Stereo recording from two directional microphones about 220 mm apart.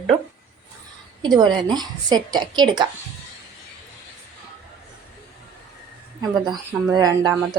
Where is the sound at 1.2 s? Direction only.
20° right (ahead or behind).